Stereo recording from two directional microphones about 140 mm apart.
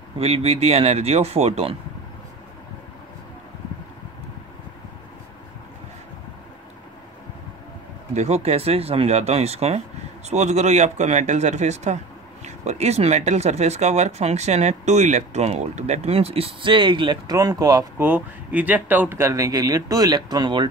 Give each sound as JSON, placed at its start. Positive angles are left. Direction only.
{"t": 0.2, "sound": "speech", "side_deg": -45}
{"t": 8.1, "sound": "speech", "side_deg": -50}
{"t": 17.9, "sound": "speech", "side_deg": -10}